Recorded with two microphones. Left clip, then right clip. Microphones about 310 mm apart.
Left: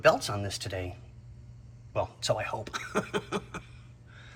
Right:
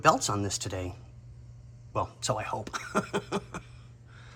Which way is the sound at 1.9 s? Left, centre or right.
Centre.